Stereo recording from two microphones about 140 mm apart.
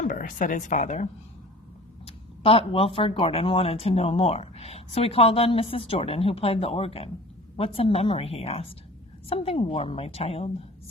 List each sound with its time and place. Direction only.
0.0 s speech: 70° left (ahead or behind)
2.0 s speech: 40° left (ahead or behind)